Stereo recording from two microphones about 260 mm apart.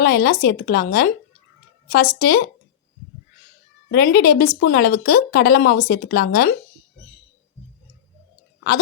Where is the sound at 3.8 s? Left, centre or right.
Left.